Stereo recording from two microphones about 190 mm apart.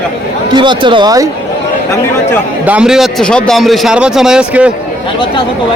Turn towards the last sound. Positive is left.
turn(degrees=-5)  # may be behind; listen again after turning